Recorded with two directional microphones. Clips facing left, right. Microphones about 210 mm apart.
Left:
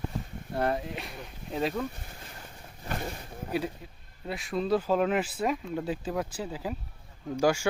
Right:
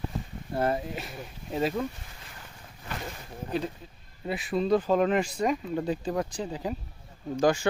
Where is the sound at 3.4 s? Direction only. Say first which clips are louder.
Even; 10° left (ahead or behind).